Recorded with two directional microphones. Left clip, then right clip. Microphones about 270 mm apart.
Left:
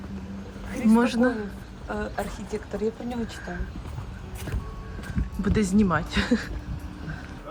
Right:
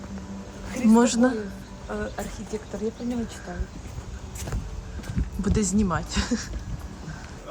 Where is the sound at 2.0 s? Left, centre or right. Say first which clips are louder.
Left 2 dB; left.